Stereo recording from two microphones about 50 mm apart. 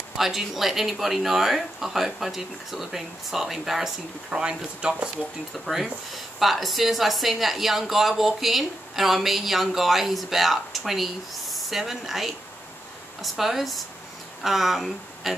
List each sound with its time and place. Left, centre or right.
0.2 s a woman's voice: centre
4.3 s speech: centre
6.1 s a woman's voice: centre